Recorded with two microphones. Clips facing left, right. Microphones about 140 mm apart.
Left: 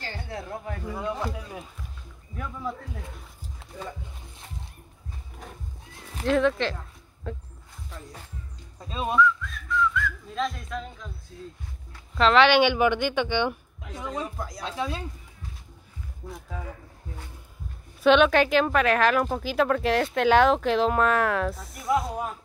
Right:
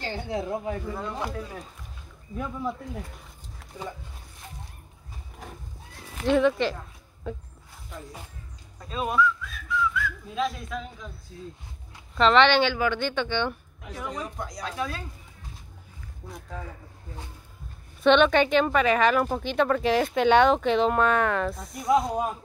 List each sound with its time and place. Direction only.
0.0 s speech: 20° right (ahead or behind)
0.8 s speech: 10° left (ahead or behind)
2.3 s speech: 10° right (ahead or behind)
6.2 s speech: centre (ahead or behind)
8.8 s speech: 25° left (ahead or behind)
9.1 s speech: 5° right (ahead or behind)
12.2 s speech: 5° left (ahead or behind)
14.0 s speech: centre (ahead or behind)
14.6 s speech: 25° left (ahead or behind)
16.3 s speech: 5° left (ahead or behind)
18.0 s speech: 5° left (ahead or behind)
22.0 s speech: 20° right (ahead or behind)